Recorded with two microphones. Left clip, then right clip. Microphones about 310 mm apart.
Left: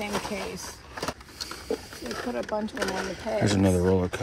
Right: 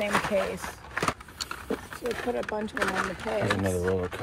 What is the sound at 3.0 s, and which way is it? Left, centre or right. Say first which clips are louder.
Speech: even; left.